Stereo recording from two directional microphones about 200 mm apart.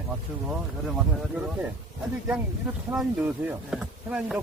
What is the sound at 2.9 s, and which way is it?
Speech, 10° right (ahead or behind).